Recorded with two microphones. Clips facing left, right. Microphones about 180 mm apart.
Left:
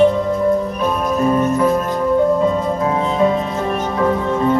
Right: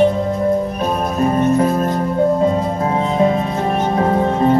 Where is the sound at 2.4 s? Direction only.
35° right (ahead or behind).